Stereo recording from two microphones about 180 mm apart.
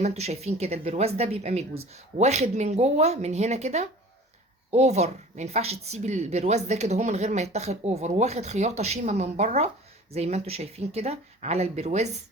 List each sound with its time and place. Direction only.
0.0 s speech: 35° right (ahead or behind)